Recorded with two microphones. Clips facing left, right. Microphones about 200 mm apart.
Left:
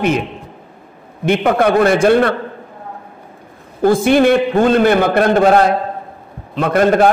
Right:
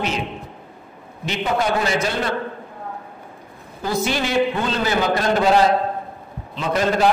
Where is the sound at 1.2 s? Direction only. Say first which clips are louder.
Left 9 dB; 55° left (ahead or behind).